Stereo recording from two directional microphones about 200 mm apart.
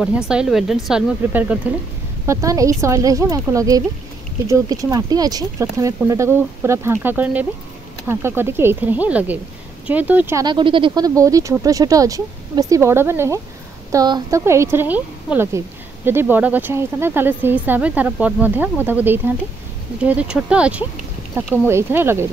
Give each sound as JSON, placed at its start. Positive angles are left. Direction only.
{"t": 0.3, "sound": "speech", "side_deg": -5}